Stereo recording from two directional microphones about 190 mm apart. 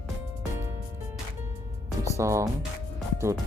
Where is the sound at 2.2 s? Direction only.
15° right (ahead or behind).